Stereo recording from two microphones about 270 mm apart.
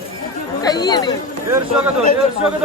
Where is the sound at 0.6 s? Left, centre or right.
Centre.